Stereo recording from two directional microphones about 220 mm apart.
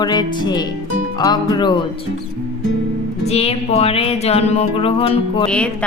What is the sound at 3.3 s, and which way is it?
Music, 30° left (ahead or behind).